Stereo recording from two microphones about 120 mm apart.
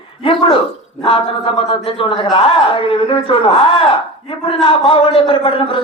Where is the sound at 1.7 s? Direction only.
50° left (ahead or behind).